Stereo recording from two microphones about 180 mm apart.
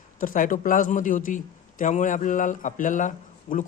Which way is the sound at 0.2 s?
50° left (ahead or behind).